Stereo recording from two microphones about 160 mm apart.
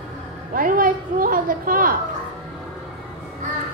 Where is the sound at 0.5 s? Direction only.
60° right (ahead or behind).